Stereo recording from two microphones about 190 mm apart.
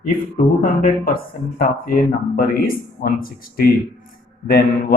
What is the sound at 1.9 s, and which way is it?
Speech, 50° left (ahead or behind).